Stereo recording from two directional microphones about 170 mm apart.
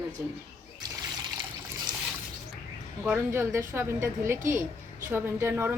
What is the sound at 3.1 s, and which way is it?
A woman's voice, 10° right (ahead or behind).